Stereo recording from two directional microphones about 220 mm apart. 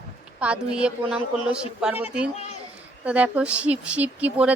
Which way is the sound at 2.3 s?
30° left (ahead or behind).